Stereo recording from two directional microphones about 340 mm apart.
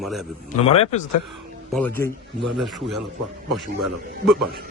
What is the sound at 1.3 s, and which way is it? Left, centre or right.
A man's voice, centre.